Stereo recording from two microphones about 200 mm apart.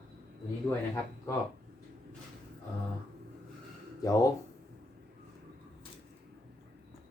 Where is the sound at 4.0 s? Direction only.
15° left (ahead or behind).